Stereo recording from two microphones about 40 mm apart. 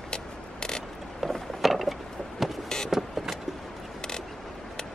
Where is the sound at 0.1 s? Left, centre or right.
Centre.